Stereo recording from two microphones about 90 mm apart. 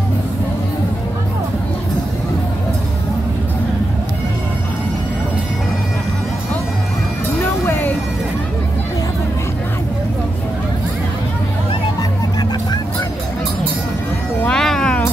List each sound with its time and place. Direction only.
7.6 s vehicle: 25° left (ahead or behind)
14.4 s music: 5° left (ahead or behind)